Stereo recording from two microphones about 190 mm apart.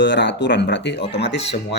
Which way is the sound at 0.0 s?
65° left (ahead or behind).